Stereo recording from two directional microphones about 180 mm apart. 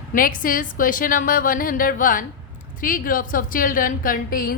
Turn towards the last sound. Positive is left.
turn(degrees=50)  # may be behind; listen again after turning